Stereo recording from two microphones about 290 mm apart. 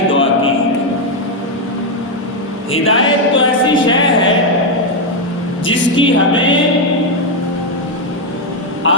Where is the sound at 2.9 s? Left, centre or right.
Left.